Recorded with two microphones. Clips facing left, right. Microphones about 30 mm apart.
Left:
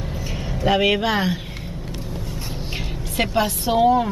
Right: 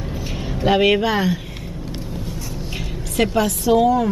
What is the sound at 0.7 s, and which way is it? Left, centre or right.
Speech, centre.